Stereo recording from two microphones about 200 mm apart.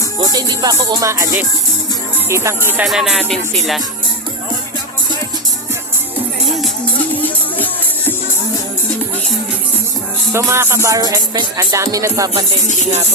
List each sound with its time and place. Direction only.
0.2 s music: 20° right (ahead or behind)
2.3 s speech: 15° right (ahead or behind)
7.2 s music: 10° left (ahead or behind)
10.3 s music: 15° right (ahead or behind)